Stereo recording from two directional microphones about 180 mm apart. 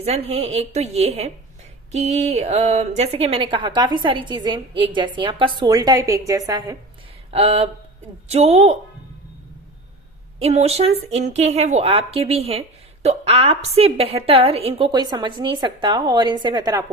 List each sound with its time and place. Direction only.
0.0 s a woman's voice: 35° right (ahead or behind); by 6.7 s 20° right (ahead or behind)
7.3 s a woman's voice: 35° right (ahead or behind)
10.4 s a woman's voice: 35° right (ahead or behind)